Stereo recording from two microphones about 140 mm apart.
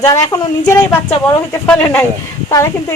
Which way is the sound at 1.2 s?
15° left (ahead or behind).